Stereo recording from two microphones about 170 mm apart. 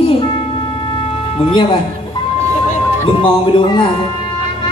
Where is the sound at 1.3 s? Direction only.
30° left (ahead or behind).